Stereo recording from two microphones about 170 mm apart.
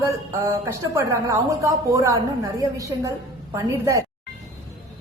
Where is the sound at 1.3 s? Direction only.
20° right (ahead or behind).